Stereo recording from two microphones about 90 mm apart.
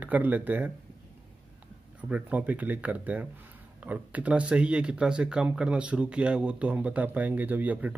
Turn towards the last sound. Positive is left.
turn(degrees=-15)  # may be behind; listen again after turning